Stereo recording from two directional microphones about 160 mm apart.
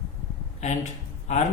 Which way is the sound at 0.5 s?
45° left (ahead or behind).